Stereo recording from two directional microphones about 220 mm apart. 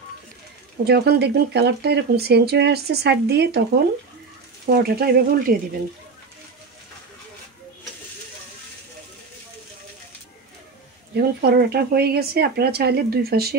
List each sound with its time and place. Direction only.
0.8 s speech: 45° right (ahead or behind)
4.6 s speech: 45° right (ahead or behind)
11.1 s speech: 45° right (ahead or behind)